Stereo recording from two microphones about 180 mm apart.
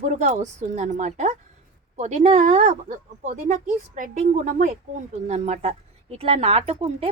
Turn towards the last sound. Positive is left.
turn(degrees=-35)  # may be behind; listen again after turning